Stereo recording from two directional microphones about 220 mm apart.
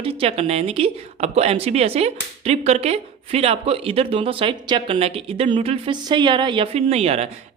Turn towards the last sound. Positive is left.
turn(degrees=-30)  # may be behind; listen again after turning